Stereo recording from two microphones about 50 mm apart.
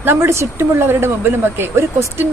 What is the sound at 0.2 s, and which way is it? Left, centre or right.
A woman's voice, right.